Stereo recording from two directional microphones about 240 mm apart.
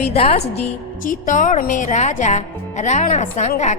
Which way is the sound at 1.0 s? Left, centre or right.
Left.